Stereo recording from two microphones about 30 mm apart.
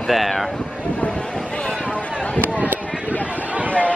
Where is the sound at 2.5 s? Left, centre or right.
Right.